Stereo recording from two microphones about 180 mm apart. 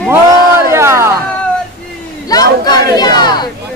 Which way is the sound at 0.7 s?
15° right (ahead or behind).